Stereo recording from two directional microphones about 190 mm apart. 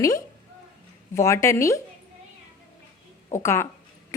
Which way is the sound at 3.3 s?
15° left (ahead or behind).